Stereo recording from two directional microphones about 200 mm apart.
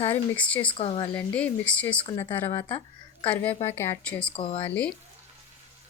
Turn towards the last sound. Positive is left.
turn(degrees=25)  # may be behind; listen again after turning